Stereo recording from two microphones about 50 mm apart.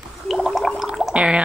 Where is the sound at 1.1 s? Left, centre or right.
Centre.